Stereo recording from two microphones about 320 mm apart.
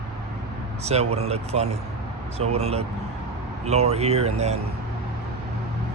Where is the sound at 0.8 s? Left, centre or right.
Centre.